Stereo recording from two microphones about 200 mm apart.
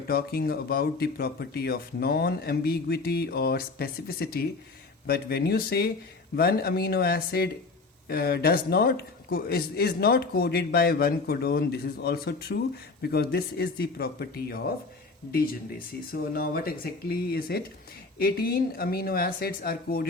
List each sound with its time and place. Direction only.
0.1 s a man's voice: 50° left (ahead or behind)
15.9 s a man's voice: 50° left (ahead or behind)